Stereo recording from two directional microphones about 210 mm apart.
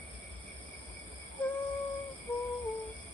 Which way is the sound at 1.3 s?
5° left (ahead or behind).